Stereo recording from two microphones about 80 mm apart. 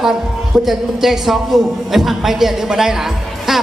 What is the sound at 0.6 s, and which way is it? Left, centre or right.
A man's voice, centre.